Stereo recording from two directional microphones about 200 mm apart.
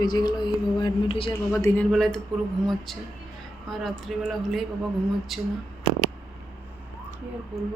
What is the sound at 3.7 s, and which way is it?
Speech, centre (ahead or behind).